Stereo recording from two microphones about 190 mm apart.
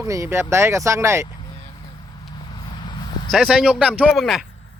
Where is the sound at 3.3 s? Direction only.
Centre (ahead or behind).